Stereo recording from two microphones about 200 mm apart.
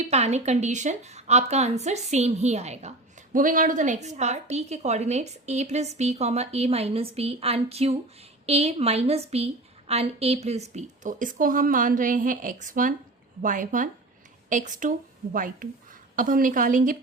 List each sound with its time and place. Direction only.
0.1 s a woman's voice: 35° right (ahead or behind)